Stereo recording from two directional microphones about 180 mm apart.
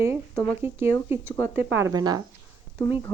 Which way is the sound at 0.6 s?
15° right (ahead or behind).